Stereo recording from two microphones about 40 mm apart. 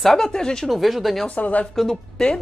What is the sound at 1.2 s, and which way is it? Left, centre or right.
Speech, left.